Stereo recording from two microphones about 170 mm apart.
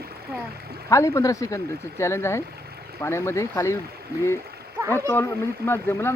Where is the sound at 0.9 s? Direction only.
20° left (ahead or behind).